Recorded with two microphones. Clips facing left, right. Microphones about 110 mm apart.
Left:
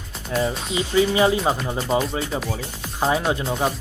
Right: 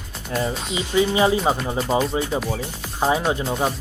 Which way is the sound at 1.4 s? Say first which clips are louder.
Right 1 dB; 5° right (ahead or behind).